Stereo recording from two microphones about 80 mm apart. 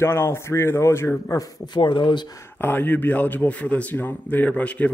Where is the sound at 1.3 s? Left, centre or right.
Left.